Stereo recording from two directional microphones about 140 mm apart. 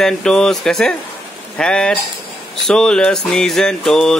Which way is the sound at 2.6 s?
5° left (ahead or behind).